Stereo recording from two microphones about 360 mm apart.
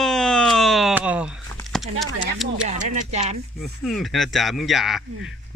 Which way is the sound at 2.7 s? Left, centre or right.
Centre.